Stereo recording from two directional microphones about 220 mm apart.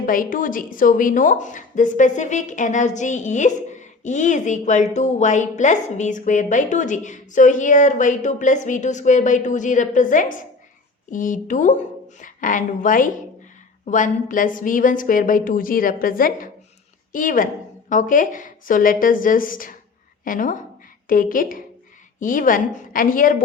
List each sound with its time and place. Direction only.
0.0 s a woman's voice: 40° left (ahead or behind)